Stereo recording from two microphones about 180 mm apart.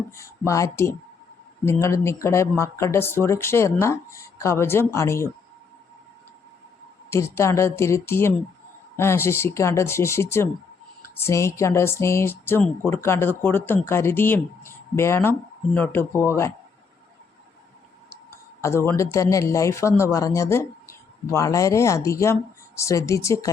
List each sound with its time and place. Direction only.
0.2 s speech: 15° left (ahead or behind)
7.1 s speech: 15° left (ahead or behind)
18.6 s speech: 15° left (ahead or behind)